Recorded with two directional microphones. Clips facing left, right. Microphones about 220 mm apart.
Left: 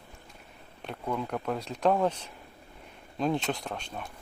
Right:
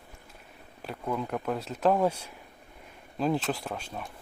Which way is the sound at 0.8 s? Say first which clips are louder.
Right 1 dB; centre (ahead or behind).